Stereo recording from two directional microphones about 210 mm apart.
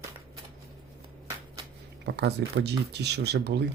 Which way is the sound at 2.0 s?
55° right (ahead or behind).